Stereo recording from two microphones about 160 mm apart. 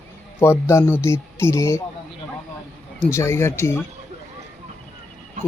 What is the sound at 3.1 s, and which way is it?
Speech, 15° left (ahead or behind).